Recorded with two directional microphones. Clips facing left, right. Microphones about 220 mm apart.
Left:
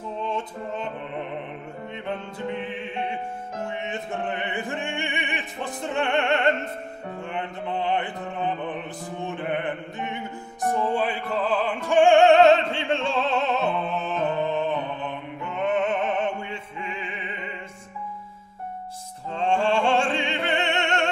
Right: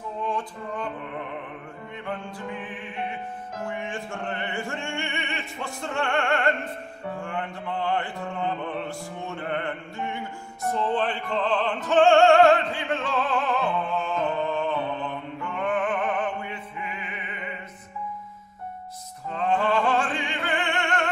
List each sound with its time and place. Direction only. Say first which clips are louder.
0.2 s music: even; 25° left (ahead or behind)
2.0 s mantra: left 3 dB; 25° left (ahead or behind)
10.7 s music: left 1 dB; 10° left (ahead or behind); by 17.3 s 25° left (ahead or behind)
19.3 s opera: left 1 dB; 30° left (ahead or behind)